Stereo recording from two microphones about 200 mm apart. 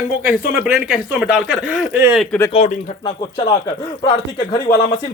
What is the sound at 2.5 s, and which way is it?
Speech, 35° left (ahead or behind).